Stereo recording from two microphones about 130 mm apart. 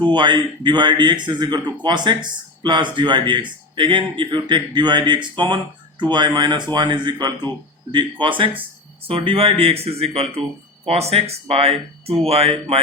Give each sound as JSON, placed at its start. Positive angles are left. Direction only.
{"t": 0.0, "sound": "speech", "side_deg": -35}